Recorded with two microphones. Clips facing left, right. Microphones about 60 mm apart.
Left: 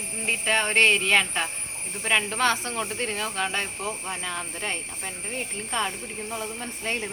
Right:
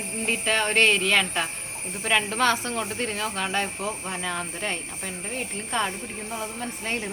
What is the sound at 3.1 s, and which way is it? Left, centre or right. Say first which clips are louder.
Speech: right 1 dB; right.